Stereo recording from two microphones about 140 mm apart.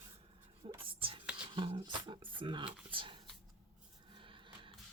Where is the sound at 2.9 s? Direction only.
35° right (ahead or behind).